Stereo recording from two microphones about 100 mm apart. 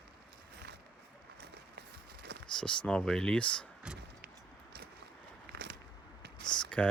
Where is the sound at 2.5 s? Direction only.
10° left (ahead or behind).